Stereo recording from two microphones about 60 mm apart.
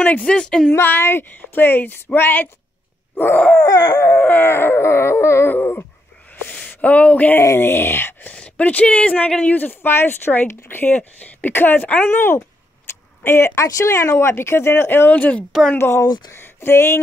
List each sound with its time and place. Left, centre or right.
0.0 s speech: left
0.7 s speech: left
3.6 s a sound: left
4.2 s speech: left
6.7 s speech: left
7.5 s speech: left
8.3 s a woman's voice: left
11.0 s a woman's voice: left
11.5 s speech: left
13.7 s speech: left
15.0 s a woman's voice: left
16.0 s speech: left